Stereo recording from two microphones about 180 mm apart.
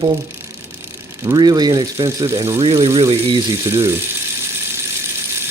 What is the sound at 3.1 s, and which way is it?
Speech, 30° right (ahead or behind).